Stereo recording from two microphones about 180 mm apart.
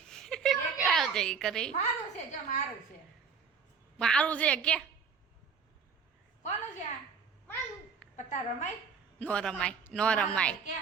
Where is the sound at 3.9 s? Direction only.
5° left (ahead or behind).